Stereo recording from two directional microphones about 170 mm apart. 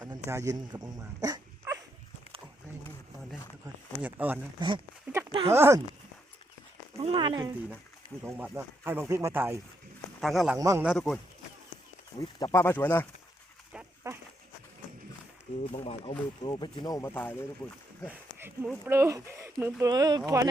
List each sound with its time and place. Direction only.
0.0 s dog: 20° right (ahead or behind)
4.0 s speech: 10° right (ahead or behind)
5.3 s speech: 30° right (ahead or behind)
5.5 s speech: 15° right (ahead or behind)
6.9 s speech: 35° right (ahead or behind)
8.2 s speech: 10° right (ahead or behind)
10.2 s a man's voice: centre (ahead or behind)
10.6 s speech: 20° right (ahead or behind)
10.8 s a man's voice: 5° left (ahead or behind)
12.2 s speech: 20° left (ahead or behind)
13.7 s dog: 5° right (ahead or behind)
15.7 s speech: 35° left (ahead or behind); by 17.8 s 5° left (ahead or behind)
18.1 s a sound: 10° right (ahead or behind)
18.9 s speech: 15° right (ahead or behind)